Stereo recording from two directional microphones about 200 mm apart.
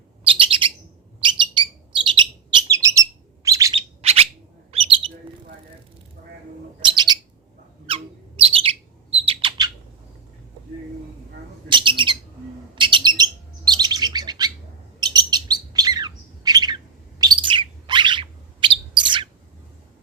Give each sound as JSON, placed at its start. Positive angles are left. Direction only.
{"t": 0.3, "sound": "bird", "side_deg": -25}
{"t": 2.5, "sound": "bird", "side_deg": -15}
{"t": 3.7, "sound": "bird", "side_deg": -30}
{"t": 6.8, "sound": "bird", "side_deg": -20}
{"t": 11.7, "sound": "bird", "side_deg": -25}